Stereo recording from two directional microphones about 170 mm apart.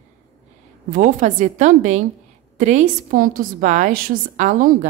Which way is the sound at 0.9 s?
45° right (ahead or behind).